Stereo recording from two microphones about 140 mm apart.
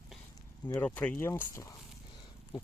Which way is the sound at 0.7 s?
20° left (ahead or behind).